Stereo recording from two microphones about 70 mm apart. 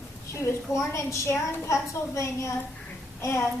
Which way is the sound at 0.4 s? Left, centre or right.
Left.